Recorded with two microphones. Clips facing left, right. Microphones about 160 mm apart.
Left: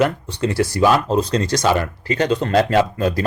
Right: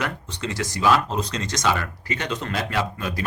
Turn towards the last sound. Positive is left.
turn(degrees=40)  # may be behind; listen again after turning